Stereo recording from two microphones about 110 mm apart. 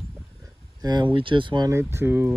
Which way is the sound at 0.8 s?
45° right (ahead or behind).